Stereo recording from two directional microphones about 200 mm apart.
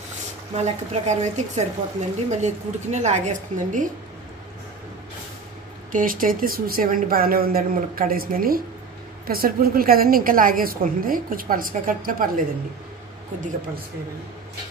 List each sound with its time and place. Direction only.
0.6 s a woman's voice: 35° right (ahead or behind)
5.9 s a woman's voice: 45° right (ahead or behind)